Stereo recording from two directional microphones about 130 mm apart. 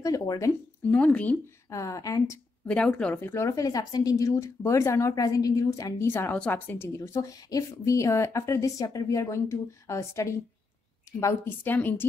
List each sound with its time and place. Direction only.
0.0 s a woman's voice: 25° left (ahead or behind)
0.8 s a woman's voice: 10° left (ahead or behind)
1.7 s a woman's voice: 25° left (ahead or behind)
2.6 s a woman's voice: 10° left (ahead or behind)
7.0 s a woman's voice: 25° left (ahead or behind)